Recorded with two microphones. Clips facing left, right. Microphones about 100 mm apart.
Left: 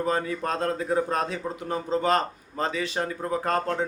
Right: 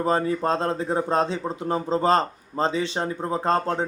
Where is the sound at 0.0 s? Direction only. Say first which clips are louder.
Right 4 dB; 30° right (ahead or behind).